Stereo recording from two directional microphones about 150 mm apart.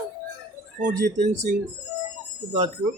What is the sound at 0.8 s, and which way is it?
Speech, 55° right (ahead or behind).